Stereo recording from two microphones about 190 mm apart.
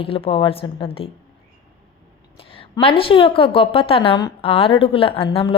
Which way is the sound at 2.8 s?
30° left (ahead or behind).